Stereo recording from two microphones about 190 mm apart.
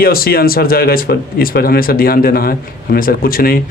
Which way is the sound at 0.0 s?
50° left (ahead or behind).